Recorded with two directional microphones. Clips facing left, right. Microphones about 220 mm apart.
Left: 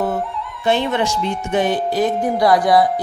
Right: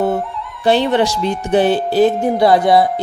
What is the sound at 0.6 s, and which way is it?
Speech, 35° right (ahead or behind).